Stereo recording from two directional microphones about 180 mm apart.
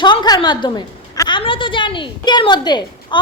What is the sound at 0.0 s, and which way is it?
A woman's voice, 25° left (ahead or behind).